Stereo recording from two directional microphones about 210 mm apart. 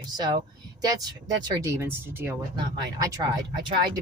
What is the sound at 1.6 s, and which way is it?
Speech, 10° right (ahead or behind).